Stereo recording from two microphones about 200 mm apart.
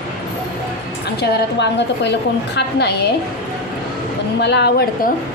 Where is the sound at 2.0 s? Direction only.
60° left (ahead or behind).